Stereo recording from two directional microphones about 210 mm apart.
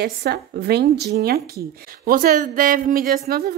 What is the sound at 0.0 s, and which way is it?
Speech, 50° right (ahead or behind).